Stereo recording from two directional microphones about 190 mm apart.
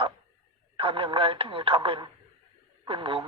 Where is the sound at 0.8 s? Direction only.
30° right (ahead or behind).